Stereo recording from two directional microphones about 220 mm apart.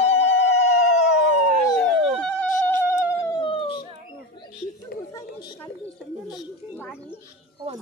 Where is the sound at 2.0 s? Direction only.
5° left (ahead or behind); by 3.8 s 25° left (ahead or behind).